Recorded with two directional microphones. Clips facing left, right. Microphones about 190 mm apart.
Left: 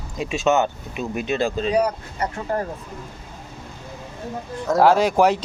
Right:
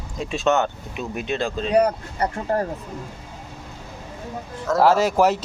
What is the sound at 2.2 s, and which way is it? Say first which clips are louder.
Speech: right 2 dB; 35° right (ahead or behind).